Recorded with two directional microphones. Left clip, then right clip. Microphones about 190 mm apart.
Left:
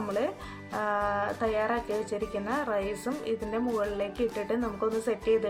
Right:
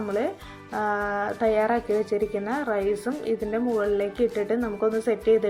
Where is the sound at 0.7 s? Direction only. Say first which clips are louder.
Right 3 dB; 15° right (ahead or behind).